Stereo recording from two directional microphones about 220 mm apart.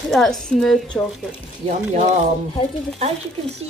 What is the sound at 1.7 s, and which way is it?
Speech, 35° right (ahead or behind).